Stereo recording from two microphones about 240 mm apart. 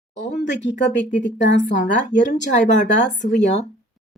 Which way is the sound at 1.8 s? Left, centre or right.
Left.